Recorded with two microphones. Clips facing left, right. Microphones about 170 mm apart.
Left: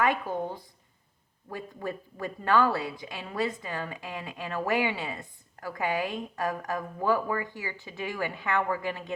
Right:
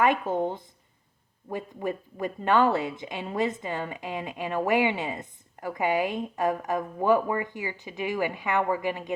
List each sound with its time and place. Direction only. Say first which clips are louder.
0.0 s speech: right 4 dB; 20° right (ahead or behind)